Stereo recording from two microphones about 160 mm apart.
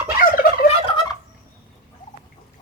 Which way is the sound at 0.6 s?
30° left (ahead or behind).